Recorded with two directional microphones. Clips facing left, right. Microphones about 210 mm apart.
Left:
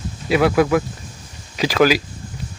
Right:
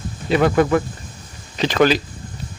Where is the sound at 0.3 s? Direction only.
5° left (ahead or behind).